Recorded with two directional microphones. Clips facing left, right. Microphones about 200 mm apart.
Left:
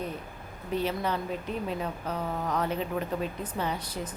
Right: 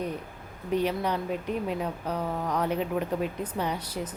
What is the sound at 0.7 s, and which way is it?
Speech, 15° right (ahead or behind).